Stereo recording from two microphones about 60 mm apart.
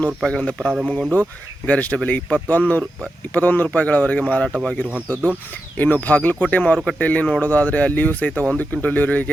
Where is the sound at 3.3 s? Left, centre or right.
Left.